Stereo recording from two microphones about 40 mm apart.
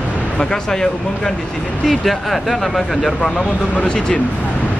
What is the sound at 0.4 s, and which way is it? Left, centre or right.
Speech, centre.